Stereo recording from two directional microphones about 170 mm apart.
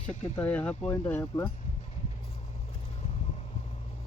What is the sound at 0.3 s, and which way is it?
Speech, 10° left (ahead or behind).